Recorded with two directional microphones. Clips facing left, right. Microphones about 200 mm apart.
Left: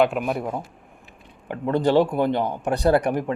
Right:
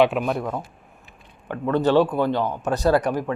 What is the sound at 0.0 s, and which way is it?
A man's voice, 5° left (ahead or behind).